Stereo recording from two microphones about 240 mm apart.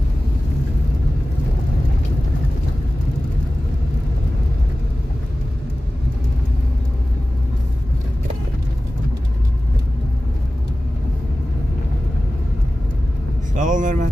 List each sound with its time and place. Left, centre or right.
13.6 s vehicle: right